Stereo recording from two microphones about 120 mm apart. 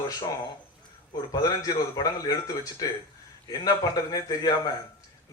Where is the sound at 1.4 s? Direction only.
30° left (ahead or behind).